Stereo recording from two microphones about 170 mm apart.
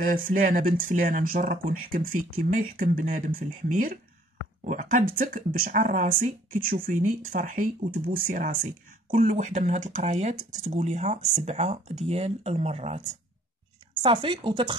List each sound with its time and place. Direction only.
0.0 s speech: 50° right (ahead or behind)
14.0 s speech: 30° right (ahead or behind)